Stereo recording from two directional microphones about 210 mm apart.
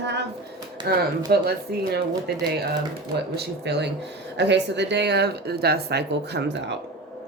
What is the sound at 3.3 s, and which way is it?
Speech, 50° right (ahead or behind).